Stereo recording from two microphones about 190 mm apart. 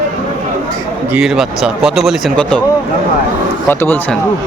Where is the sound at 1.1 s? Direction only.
5° right (ahead or behind).